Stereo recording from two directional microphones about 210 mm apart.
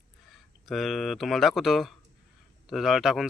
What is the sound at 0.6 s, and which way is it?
A man's voice, centre (ahead or behind).